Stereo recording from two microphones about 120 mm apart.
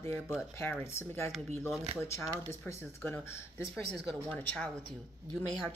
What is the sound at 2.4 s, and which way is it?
Speech, 20° left (ahead or behind).